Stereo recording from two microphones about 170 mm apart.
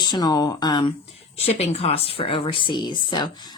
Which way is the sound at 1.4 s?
35° left (ahead or behind).